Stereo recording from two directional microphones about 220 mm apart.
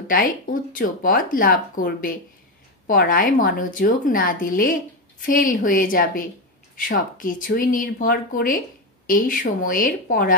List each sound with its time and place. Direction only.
0.1 s speech: 40° left (ahead or behind)